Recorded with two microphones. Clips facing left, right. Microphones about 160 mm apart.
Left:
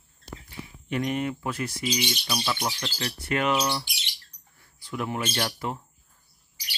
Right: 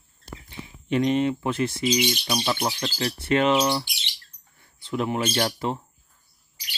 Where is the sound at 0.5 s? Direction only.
25° right (ahead or behind).